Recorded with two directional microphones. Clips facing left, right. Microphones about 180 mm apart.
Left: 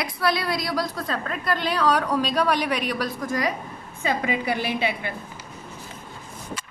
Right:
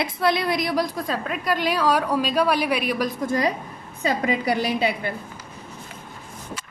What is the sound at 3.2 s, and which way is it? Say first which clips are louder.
A woman's voice: right 3 dB; 30° right (ahead or behind).